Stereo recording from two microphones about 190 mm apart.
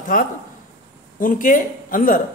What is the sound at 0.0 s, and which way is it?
A man's voice, 45° left (ahead or behind).